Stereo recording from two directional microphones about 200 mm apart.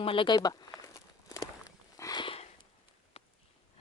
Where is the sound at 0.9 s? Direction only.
15° left (ahead or behind).